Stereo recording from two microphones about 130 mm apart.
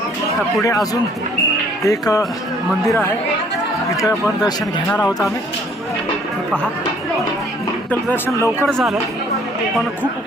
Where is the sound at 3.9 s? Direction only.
30° left (ahead or behind).